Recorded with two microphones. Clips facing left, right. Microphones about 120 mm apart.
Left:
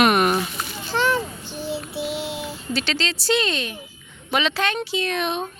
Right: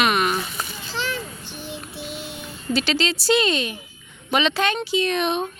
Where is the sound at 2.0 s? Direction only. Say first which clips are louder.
Left 7 dB; 80° left.